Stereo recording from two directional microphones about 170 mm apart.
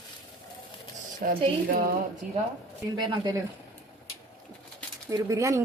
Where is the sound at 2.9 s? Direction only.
25° right (ahead or behind).